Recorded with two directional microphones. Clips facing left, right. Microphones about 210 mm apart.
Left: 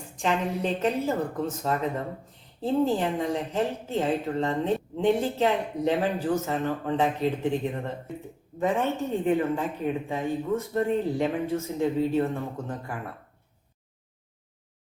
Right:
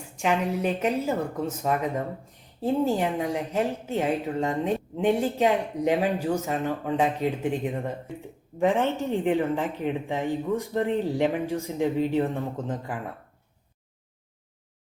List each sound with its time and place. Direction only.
0.2 s a woman's voice: 10° right (ahead or behind)